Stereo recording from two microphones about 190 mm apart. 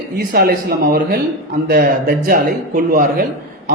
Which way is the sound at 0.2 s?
50° right (ahead or behind).